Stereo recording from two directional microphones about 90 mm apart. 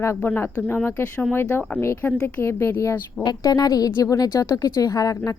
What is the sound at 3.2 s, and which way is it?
Speech, 50° left (ahead or behind).